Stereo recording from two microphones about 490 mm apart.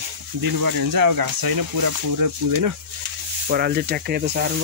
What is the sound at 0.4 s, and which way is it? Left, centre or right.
Speech, right.